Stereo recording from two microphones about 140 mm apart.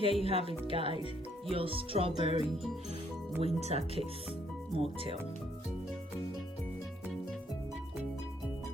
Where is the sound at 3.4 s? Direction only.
50° right (ahead or behind).